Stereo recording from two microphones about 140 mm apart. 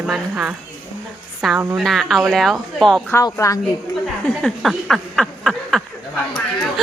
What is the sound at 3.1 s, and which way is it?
Speech, 25° left (ahead or behind).